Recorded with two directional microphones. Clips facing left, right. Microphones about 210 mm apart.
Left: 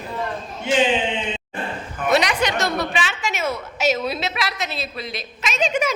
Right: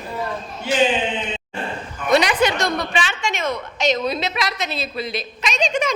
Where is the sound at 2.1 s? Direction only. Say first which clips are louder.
Right 3 dB; centre (ahead or behind).